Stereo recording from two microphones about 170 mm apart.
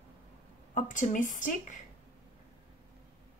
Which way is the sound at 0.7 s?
50° left (ahead or behind).